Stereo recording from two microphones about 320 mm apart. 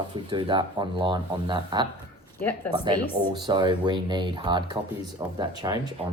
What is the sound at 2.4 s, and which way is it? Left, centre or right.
Speech, centre.